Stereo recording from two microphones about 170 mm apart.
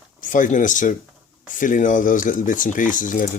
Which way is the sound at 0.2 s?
50° left (ahead or behind).